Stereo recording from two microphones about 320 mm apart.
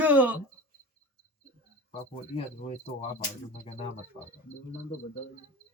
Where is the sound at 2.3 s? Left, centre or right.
Centre.